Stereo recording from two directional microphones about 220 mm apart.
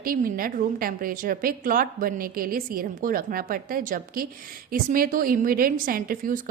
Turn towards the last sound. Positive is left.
turn(degrees=-40)  # may be behind; listen again after turning